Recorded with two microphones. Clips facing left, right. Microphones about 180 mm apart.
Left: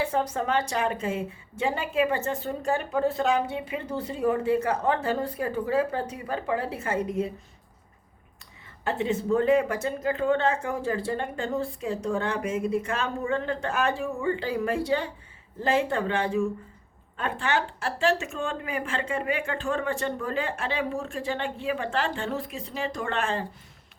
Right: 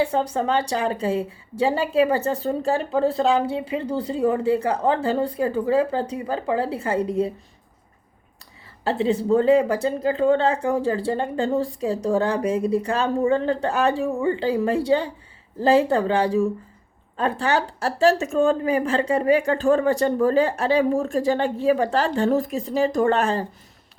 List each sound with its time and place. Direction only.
0.0 s a woman's voice: 30° right (ahead or behind)
8.8 s a woman's voice: 30° right (ahead or behind)